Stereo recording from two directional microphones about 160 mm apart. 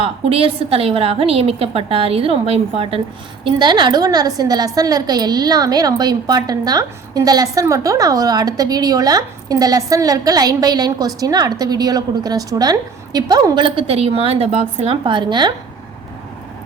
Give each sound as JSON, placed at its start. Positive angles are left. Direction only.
{"t": 0.0, "sound": "a woman's voice", "side_deg": -35}